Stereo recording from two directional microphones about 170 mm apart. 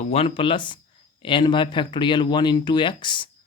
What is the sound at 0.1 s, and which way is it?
Speech, 35° left (ahead or behind).